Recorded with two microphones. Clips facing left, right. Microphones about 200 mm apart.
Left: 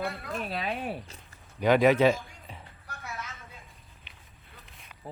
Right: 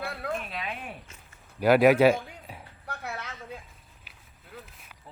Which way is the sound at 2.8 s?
65° right (ahead or behind).